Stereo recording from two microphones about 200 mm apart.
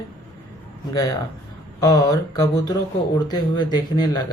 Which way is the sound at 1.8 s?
20° left (ahead or behind).